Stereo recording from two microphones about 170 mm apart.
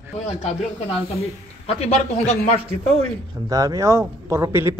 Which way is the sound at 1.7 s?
35° left (ahead or behind).